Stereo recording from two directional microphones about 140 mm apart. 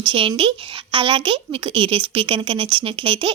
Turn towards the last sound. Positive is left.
turn(degrees=-35)  # may be behind; listen again after turning